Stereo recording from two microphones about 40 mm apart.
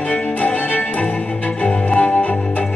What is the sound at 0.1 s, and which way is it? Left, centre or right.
Violin, left.